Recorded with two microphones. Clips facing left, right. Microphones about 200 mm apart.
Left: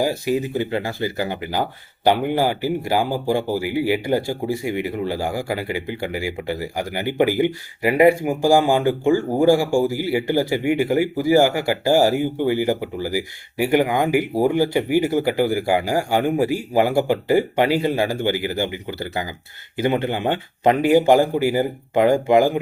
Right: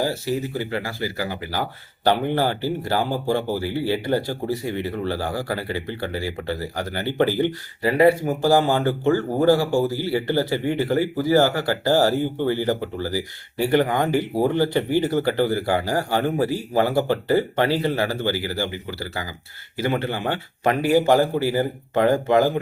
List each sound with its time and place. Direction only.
0.0 s speech: 15° left (ahead or behind)